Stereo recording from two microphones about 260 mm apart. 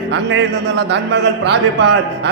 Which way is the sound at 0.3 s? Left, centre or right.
Right.